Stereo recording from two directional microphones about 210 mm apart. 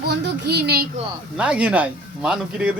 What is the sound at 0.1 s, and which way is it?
Speech, 50° right (ahead or behind).